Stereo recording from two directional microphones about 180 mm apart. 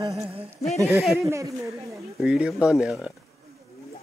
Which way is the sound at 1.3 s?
15° right (ahead or behind).